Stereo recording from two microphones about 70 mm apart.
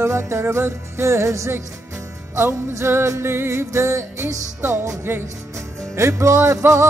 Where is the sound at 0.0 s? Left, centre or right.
Right.